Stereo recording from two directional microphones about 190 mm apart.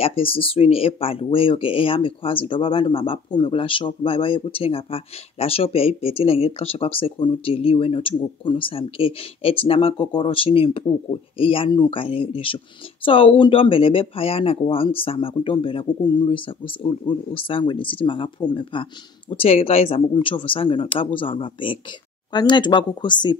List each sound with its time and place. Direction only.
0.0 s speech: 30° left (ahead or behind)